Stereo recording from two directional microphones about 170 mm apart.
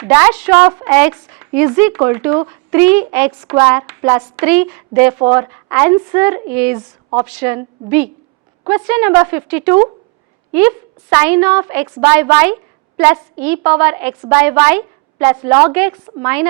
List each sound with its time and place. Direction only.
0.0 s speech: 15° right (ahead or behind)
0.7 s speech: 20° right (ahead or behind)
0.9 s speech: 10° right (ahead or behind)